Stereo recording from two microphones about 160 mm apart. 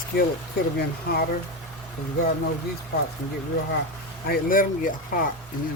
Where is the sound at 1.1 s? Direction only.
85° left.